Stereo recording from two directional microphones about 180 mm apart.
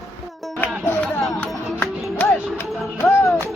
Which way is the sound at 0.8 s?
10° left (ahead or behind).